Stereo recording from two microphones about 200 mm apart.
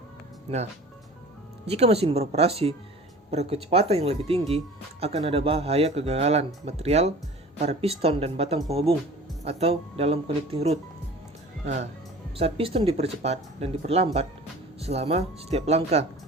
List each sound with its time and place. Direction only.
0.5 s speech: 30° right (ahead or behind)